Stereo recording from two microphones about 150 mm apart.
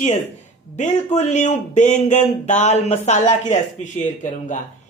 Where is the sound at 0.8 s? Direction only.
50° left (ahead or behind).